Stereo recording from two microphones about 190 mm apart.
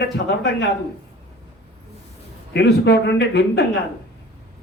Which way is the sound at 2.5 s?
65° left (ahead or behind).